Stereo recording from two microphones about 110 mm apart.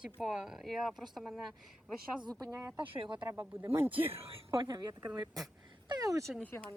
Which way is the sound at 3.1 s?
20° right (ahead or behind).